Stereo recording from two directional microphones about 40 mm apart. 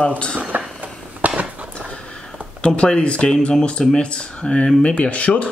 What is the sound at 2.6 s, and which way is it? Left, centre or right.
Speech, left.